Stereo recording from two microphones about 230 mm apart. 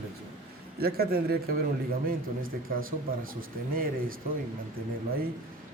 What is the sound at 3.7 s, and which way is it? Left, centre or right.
Speech, right.